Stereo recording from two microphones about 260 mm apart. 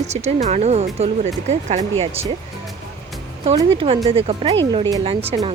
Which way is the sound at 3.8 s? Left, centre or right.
Centre.